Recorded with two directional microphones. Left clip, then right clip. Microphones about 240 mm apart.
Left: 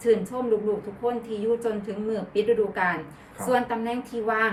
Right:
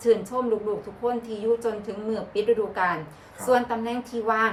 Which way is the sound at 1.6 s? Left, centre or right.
Centre.